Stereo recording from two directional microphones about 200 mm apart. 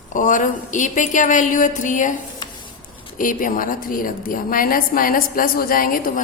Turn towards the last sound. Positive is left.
turn(degrees=45)  # may be behind; listen again after turning